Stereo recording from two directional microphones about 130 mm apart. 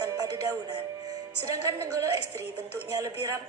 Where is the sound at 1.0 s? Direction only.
25° right (ahead or behind).